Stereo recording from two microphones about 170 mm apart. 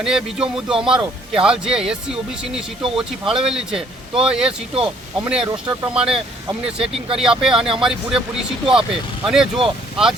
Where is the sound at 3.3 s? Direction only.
5° right (ahead or behind).